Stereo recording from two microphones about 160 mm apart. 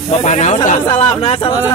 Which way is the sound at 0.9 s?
35° left (ahead or behind).